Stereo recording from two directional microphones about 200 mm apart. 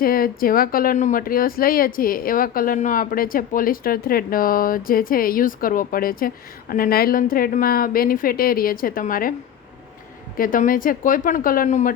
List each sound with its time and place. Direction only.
0.0 s speech: 45° left (ahead or behind)
10.3 s speech: 45° left (ahead or behind)